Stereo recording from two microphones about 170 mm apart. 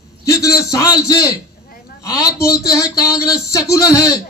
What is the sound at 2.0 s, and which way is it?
Speech, 20° left (ahead or behind).